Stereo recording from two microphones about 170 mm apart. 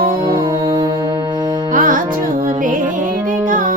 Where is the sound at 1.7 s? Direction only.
50° right (ahead or behind).